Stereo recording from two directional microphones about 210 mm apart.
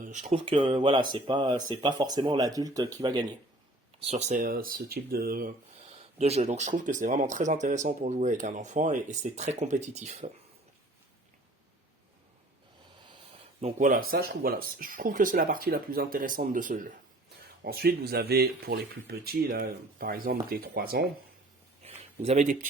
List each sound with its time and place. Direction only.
0.0 s speech: 35° right (ahead or behind); by 3.2 s 20° right (ahead or behind)
4.0 s speech: 35° right (ahead or behind)
5.9 s speech: 30° right (ahead or behind)
13.6 s speech: 35° right (ahead or behind)
21.8 s a sound: 30° right (ahead or behind)